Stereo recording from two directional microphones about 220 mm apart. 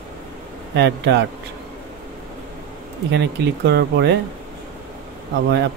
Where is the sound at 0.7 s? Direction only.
50° right (ahead or behind).